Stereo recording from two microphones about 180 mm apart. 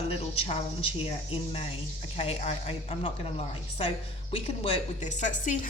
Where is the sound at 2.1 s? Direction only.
35° left (ahead or behind).